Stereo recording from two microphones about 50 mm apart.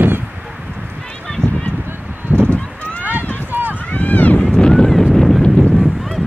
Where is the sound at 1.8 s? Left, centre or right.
Right.